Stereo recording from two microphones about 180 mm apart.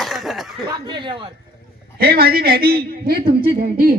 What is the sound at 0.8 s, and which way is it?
Speech, 25° right (ahead or behind).